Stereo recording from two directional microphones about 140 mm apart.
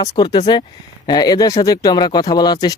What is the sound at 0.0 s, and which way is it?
Speech, 25° left (ahead or behind).